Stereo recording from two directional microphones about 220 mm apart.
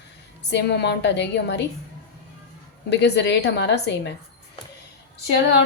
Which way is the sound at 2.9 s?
50° left (ahead or behind).